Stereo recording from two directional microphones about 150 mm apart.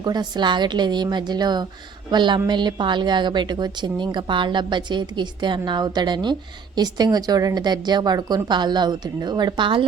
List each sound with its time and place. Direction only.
0.0 s a woman's voice: 30° right (ahead or behind)